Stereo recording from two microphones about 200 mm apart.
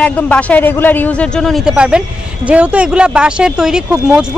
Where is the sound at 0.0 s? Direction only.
5° left (ahead or behind).